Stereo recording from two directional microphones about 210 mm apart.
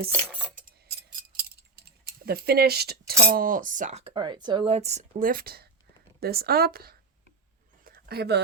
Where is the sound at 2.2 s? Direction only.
45° right (ahead or behind).